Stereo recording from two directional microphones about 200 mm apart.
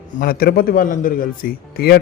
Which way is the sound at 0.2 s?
50° left (ahead or behind).